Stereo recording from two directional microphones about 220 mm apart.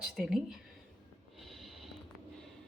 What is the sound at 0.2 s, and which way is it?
Speech, centre (ahead or behind).